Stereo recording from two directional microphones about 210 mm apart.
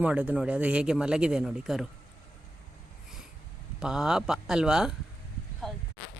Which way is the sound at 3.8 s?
5° right (ahead or behind).